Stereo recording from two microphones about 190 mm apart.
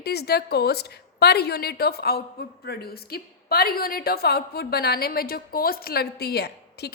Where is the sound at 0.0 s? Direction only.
55° left (ahead or behind).